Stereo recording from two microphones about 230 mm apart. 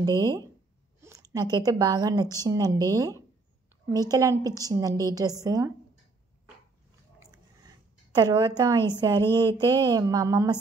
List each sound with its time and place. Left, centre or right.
0.0 s a woman's voice: centre
7.2 s a sound: centre
8.9 s a woman's voice: centre